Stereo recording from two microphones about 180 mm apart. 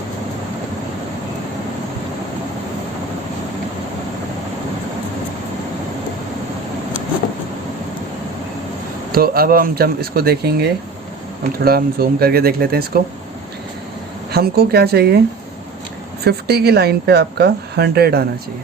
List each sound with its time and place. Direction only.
9.1 s a woman's voice: 55° right (ahead or behind)
14.3 s a woman's voice: 60° right (ahead or behind)
16.2 s a woman's voice: 65° right (ahead or behind)